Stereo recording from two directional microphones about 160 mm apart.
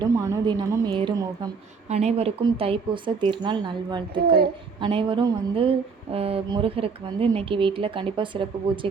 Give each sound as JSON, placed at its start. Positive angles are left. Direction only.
{"t": 0.0, "sound": "a woman's voice", "side_deg": -20}
{"t": 1.9, "sound": "speech", "side_deg": -45}